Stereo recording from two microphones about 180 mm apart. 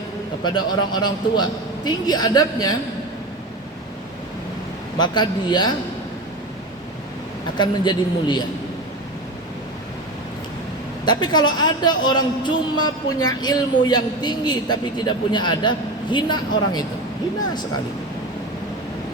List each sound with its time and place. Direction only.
0.4 s a man's voice: 25° left (ahead or behind)
4.9 s a man's voice: 25° left (ahead or behind)
7.6 s a man's voice: 25° left (ahead or behind)
11.0 s a man's voice: 25° left (ahead or behind)